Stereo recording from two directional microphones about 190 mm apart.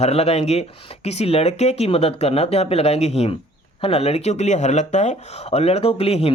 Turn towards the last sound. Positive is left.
turn(degrees=30)  # may be behind; listen again after turning